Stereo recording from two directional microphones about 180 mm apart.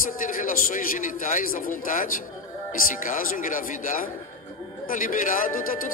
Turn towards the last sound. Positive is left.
turn(degrees=50)  # may be behind; listen again after turning